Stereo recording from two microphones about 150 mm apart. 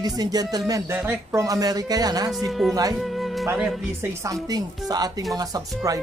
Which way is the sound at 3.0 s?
Centre (ahead or behind).